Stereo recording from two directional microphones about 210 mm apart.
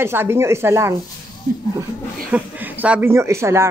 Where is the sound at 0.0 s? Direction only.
10° right (ahead or behind).